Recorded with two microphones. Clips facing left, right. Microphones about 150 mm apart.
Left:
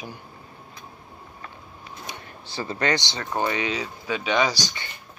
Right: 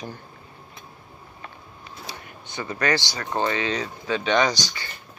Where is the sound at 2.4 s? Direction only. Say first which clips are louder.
Even; 30° left (ahead or behind); by 4.7 s 10° left (ahead or behind).